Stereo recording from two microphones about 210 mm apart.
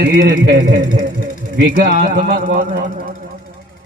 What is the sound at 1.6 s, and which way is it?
A man's voice, 45° right (ahead or behind).